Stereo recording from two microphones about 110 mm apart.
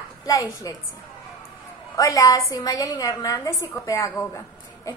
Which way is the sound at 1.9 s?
30° left (ahead or behind).